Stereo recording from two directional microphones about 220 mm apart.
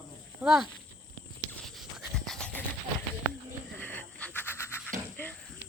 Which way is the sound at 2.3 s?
5° left (ahead or behind).